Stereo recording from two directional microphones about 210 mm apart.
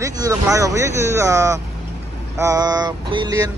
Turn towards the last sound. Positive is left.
turn(degrees=-15)  # may be behind; listen again after turning